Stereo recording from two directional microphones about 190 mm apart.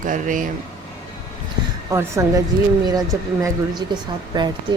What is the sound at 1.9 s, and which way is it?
A woman's voice, 15° right (ahead or behind).